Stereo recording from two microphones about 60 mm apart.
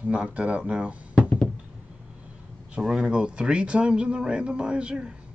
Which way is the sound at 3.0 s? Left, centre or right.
Centre.